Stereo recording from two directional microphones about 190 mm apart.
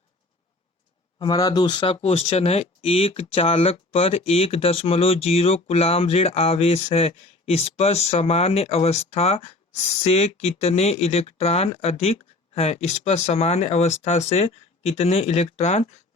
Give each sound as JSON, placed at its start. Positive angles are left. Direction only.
{"t": 1.2, "sound": "speech", "side_deg": 20}